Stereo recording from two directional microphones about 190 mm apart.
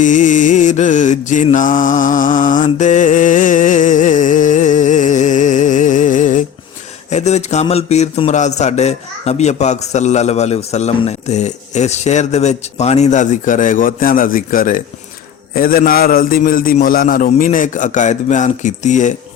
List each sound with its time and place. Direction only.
0.0 s a man's voice: 40° left (ahead or behind)
2.6 s a sound: 40° left (ahead or behind)
7.1 s a man's voice: 35° left (ahead or behind)